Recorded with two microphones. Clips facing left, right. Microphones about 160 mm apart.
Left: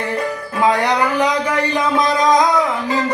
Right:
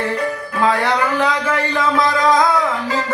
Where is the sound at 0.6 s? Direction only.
15° left (ahead or behind).